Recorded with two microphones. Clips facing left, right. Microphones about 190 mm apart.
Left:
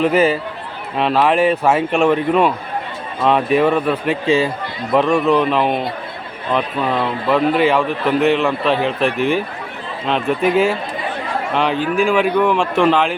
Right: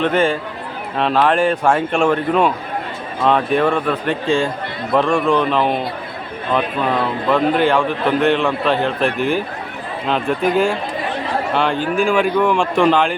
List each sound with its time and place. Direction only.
0.0 s a man's voice: 5° left (ahead or behind)